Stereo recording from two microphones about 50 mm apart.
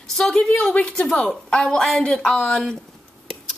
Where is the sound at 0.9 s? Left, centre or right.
Left.